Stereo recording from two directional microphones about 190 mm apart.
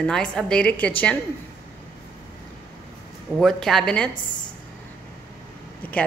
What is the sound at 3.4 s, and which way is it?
Speech, centre (ahead or behind).